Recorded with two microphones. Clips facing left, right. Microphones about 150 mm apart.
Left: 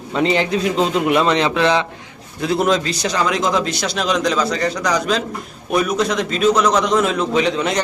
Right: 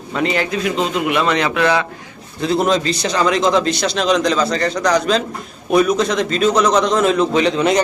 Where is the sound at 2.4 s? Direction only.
5° left (ahead or behind).